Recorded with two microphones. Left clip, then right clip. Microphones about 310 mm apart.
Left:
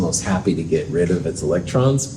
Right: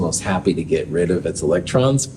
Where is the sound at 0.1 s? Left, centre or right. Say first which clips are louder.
Right 1 dB; right.